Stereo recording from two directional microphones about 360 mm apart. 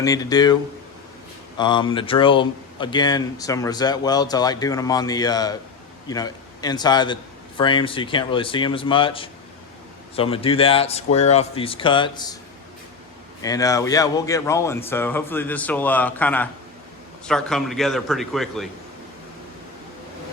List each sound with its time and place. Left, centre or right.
0.0 s speech: centre
1.5 s speech: centre
13.4 s a man's voice: centre